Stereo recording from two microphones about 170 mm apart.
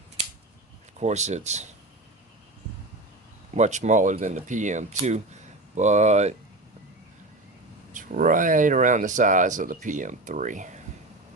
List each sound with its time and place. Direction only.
0.9 s speech: 40° right (ahead or behind)
3.5 s speech: 45° right (ahead or behind)
7.9 s speech: 50° right (ahead or behind)